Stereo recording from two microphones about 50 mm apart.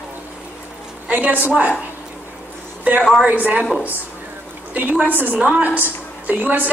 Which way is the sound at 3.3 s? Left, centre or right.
Right.